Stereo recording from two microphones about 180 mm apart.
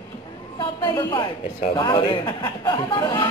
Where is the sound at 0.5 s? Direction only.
25° left (ahead or behind).